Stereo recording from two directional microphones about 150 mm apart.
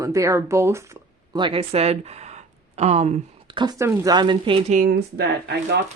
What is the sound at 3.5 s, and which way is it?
Speech, 30° right (ahead or behind).